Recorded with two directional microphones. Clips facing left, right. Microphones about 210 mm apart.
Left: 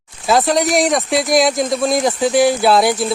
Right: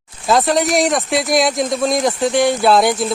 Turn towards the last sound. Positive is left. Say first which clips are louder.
# even
turn(degrees=0)  # may be behind; listen again after turning